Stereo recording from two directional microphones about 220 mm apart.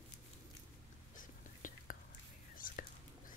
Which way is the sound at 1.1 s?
35° left (ahead or behind).